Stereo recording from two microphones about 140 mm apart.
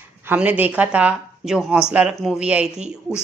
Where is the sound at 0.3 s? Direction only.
10° right (ahead or behind).